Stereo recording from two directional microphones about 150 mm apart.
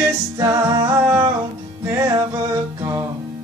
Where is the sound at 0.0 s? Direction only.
20° right (ahead or behind).